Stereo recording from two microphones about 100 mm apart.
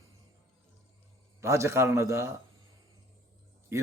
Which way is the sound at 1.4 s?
30° right (ahead or behind).